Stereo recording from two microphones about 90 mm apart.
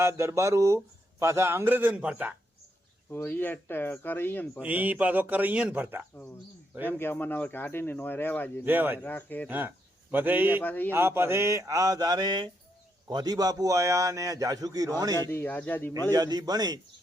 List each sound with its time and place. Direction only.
0.0 s a man's voice: 30° right (ahead or behind)
3.1 s speech: 25° left (ahead or behind)
4.6 s speech: 15° right (ahead or behind)
6.8 s speech: 25° left (ahead or behind)
8.6 s a man's voice: 20° right (ahead or behind)
9.0 s speech: 20° left (ahead or behind)
9.5 s speech: 20° right (ahead or behind)
10.6 s speech: 20° left (ahead or behind)
10.9 s a man's voice: 25° right (ahead or behind); by 14.9 s 45° right (ahead or behind)
15.1 s speech: 25° left (ahead or behind)
16.1 s speech: 45° right (ahead or behind)